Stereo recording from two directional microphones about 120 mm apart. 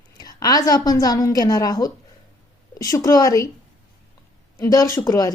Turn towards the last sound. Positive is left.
turn(degrees=30)  # may be behind; listen again after turning